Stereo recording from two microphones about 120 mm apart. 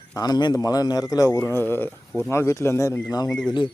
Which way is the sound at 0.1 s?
35° left (ahead or behind).